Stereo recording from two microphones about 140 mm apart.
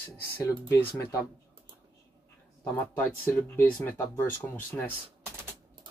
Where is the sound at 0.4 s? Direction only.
15° left (ahead or behind).